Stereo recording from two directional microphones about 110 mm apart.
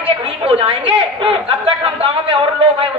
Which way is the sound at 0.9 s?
55° right (ahead or behind).